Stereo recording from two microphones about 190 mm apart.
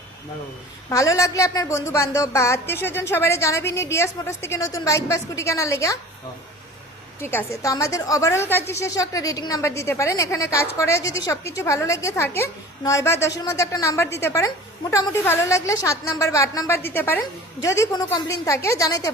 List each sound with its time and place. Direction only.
0.9 s a woman's voice: 15° left (ahead or behind)
7.2 s a woman's voice: 10° left (ahead or behind)